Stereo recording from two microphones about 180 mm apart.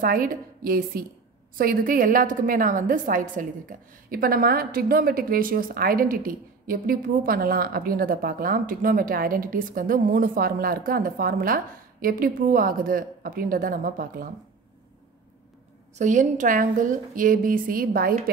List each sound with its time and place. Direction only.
0.0 s a woman's voice: 50° right (ahead or behind)
16.0 s a woman's voice: 45° right (ahead or behind)